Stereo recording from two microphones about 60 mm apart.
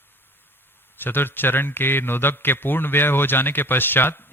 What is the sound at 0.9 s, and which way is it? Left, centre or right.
A man's voice, left.